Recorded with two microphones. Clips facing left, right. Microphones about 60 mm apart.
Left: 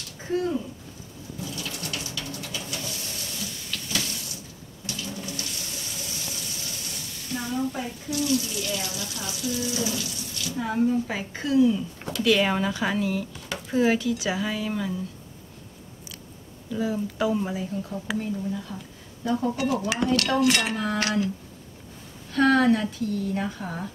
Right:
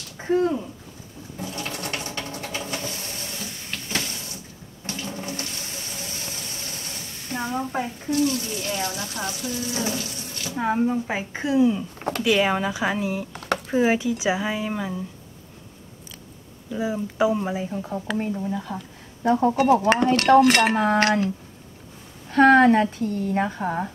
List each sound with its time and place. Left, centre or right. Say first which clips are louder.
0.3 s speech: right 5 dB; right
1.4 s sewing machine: right 4 dB; right
3.7 s water tap: right 2 dB; right
4.8 s water: right 3 dB; right
7.2 s speech: right 1 dB; right
12.2 s speech: right 1 dB; centre
16.7 s speech: right 2 dB; centre; by 21.3 s right
22.3 s speech: right 5 dB; right